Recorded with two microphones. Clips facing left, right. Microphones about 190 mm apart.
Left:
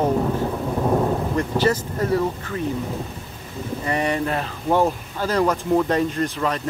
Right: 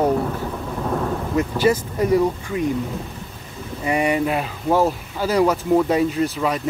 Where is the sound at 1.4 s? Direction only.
10° right (ahead or behind).